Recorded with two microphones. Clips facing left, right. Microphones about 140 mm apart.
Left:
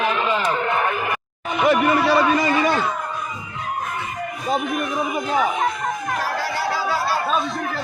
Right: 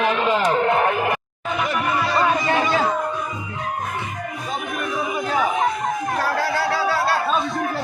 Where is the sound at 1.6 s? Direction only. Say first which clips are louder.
Left 8 dB; 70° left (ahead or behind).